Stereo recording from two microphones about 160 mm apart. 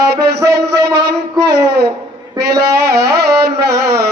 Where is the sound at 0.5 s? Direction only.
90° right.